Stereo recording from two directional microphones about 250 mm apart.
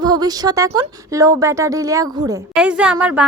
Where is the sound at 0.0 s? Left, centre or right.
Centre.